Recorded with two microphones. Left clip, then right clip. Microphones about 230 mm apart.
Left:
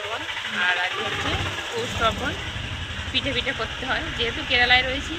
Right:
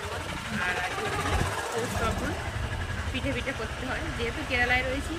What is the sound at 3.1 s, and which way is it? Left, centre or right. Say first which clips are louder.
Speech: left 8 dB; centre.